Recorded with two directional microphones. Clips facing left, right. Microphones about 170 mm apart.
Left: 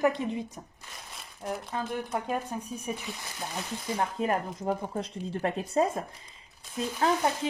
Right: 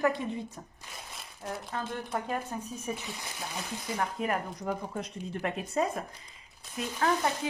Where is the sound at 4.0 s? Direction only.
30° left (ahead or behind).